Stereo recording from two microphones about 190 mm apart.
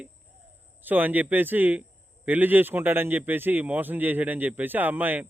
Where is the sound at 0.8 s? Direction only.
10° right (ahead or behind).